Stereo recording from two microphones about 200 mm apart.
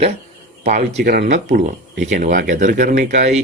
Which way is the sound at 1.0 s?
55° right (ahead or behind).